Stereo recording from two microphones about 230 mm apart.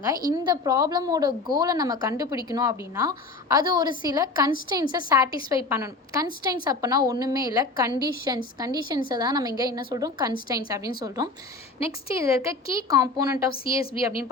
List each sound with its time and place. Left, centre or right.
0.0 s a woman's voice: centre
13.7 s a woman's voice: left